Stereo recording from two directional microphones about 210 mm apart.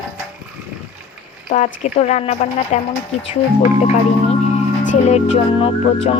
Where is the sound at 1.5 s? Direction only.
35° left (ahead or behind).